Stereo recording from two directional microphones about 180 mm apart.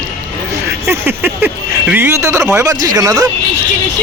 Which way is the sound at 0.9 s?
10° right (ahead or behind).